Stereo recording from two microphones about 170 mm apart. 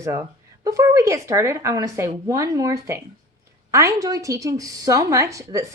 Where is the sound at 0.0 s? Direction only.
20° right (ahead or behind).